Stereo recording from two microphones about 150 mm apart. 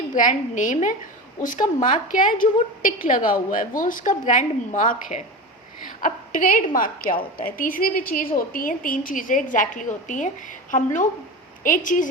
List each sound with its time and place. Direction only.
0.1 s a woman's voice: 60° left (ahead or behind)